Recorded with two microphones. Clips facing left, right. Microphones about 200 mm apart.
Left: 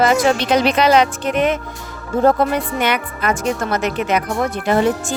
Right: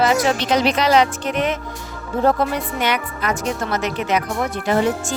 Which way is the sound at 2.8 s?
55° left (ahead or behind).